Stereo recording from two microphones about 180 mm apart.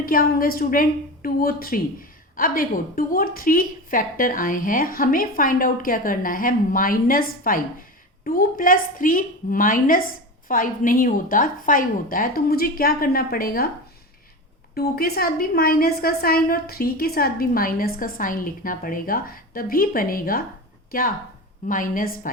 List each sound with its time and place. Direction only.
0.0 s a woman's voice: 55° left (ahead or behind)
14.8 s a woman's voice: 60° left (ahead or behind)
21.7 s a woman's voice: 50° left (ahead or behind)